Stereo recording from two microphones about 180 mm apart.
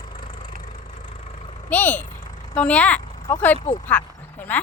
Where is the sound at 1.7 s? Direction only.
10° left (ahead or behind).